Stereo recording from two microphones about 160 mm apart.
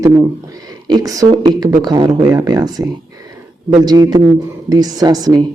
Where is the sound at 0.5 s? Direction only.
25° right (ahead or behind).